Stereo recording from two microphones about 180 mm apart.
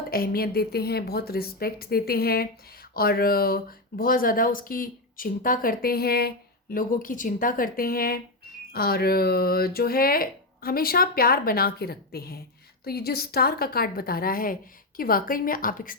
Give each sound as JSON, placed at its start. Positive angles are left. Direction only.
{"t": 0.1, "sound": "speech", "side_deg": 55}